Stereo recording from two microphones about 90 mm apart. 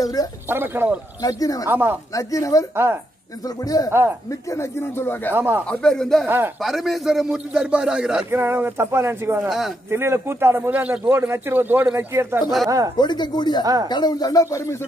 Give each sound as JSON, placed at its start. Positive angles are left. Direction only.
{"t": 0.0, "sound": "speech", "side_deg": 45}
{"t": 0.5, "sound": "a man's voice", "side_deg": -25}
{"t": 1.2, "sound": "speech", "side_deg": 40}
{"t": 1.7, "sound": "a man's voice", "side_deg": -20}
{"t": 2.1, "sound": "speech", "side_deg": 40}
{"t": 2.7, "sound": "a man's voice", "side_deg": -25}
{"t": 3.4, "sound": "speech", "side_deg": 45}
{"t": 5.3, "sound": "a man's voice", "side_deg": -25}
{"t": 5.7, "sound": "speech", "side_deg": 10}
{"t": 6.2, "sound": "a man's voice", "side_deg": -25}
{"t": 6.6, "sound": "a man's voice", "side_deg": 0}
{"t": 8.3, "sound": "a man's voice", "side_deg": -25}
{"t": 12.9, "sound": "speech", "side_deg": 55}